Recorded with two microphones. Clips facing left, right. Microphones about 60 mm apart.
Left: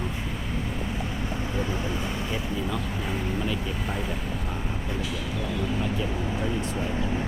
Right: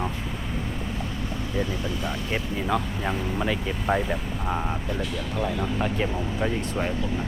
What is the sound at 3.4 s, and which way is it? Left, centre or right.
Speech, right.